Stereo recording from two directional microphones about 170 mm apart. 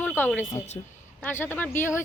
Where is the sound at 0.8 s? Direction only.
30° left (ahead or behind).